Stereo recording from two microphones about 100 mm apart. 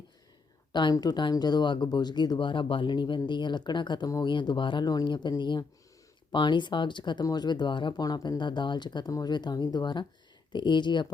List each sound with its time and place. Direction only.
0.7 s speech: 50° left (ahead or behind)